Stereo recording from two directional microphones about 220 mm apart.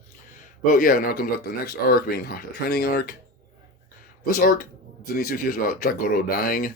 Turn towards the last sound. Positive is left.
turn(degrees=40)  # may be behind; listen again after turning